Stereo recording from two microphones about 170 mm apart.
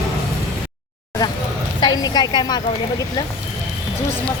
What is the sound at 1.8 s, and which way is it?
Speech, 25° left (ahead or behind).